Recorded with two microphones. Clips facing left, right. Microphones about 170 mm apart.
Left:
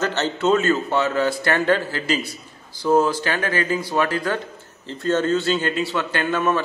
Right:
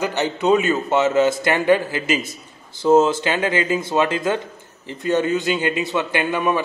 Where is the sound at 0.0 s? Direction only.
15° right (ahead or behind).